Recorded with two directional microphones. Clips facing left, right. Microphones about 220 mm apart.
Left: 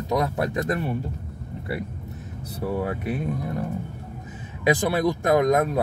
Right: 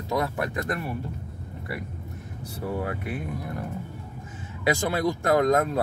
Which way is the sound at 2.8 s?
25° left (ahead or behind).